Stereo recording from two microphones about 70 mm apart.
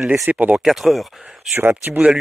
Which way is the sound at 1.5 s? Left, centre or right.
Right.